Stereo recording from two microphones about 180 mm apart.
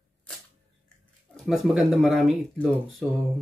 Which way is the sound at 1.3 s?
Centre (ahead or behind).